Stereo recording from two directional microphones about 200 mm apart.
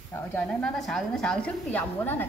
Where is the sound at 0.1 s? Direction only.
5° left (ahead or behind).